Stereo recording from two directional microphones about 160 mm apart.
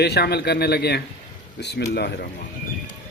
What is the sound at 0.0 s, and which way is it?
A man's voice, 90° left.